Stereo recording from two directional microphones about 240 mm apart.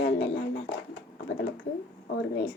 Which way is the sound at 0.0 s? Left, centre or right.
Left.